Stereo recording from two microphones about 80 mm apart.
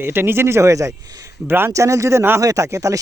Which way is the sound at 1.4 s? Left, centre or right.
Right.